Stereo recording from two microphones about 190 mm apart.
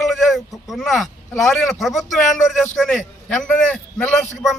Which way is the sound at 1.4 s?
Centre (ahead or behind).